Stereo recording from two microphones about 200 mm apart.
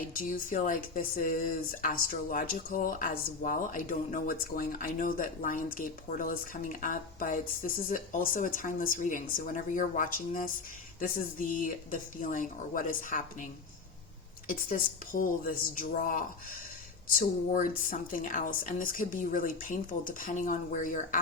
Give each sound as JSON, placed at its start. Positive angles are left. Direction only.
{"t": 0.2, "sound": "speech", "side_deg": 40}
{"t": 14.4, "sound": "a woman's voice", "side_deg": 45}